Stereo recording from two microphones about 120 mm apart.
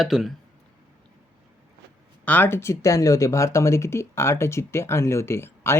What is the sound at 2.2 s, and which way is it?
Speech, 15° left (ahead or behind).